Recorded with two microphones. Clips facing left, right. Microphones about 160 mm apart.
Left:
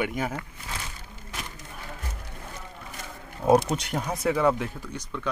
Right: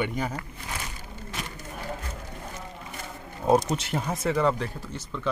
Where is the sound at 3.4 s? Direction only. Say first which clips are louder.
Left 1 dB; 5° left (ahead or behind).